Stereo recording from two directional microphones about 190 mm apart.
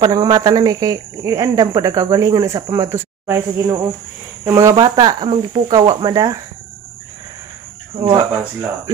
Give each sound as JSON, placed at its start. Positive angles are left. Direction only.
{"t": 0.0, "sound": "speech", "side_deg": -20}
{"t": 7.9, "sound": "speech", "side_deg": -25}